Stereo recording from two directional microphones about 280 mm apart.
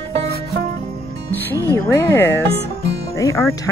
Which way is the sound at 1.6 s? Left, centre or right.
Centre.